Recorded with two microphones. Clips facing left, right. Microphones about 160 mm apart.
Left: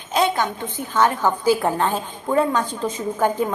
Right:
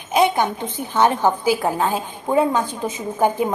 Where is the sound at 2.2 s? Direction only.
15° right (ahead or behind).